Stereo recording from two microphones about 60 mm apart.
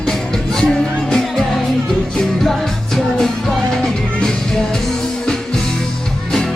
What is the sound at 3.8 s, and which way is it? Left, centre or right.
Music, centre.